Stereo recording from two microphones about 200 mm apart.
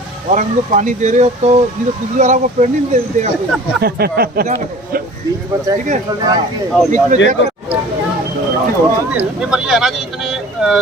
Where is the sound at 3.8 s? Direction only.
50° right (ahead or behind).